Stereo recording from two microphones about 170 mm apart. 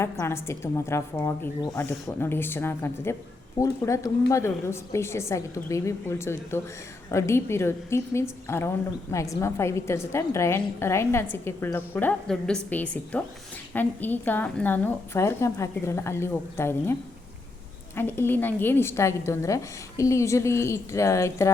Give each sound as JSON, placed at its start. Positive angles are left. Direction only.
{"t": 0.0, "sound": "a woman's voice", "side_deg": 15}
{"t": 17.9, "sound": "a woman's voice", "side_deg": 10}